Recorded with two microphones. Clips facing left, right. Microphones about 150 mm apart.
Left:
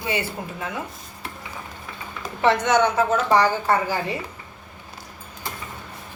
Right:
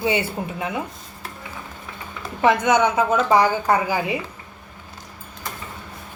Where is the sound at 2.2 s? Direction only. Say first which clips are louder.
Right 1 dB; 10° right (ahead or behind).